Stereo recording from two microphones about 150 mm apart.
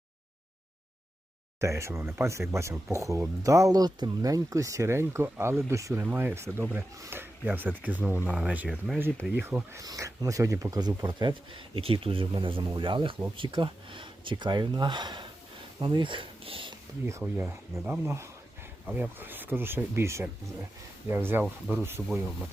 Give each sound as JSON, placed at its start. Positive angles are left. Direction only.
{"t": 1.6, "sound": "speech", "side_deg": -20}
{"t": 9.8, "sound": "speech", "side_deg": -25}
{"t": 17.1, "sound": "speech", "side_deg": -15}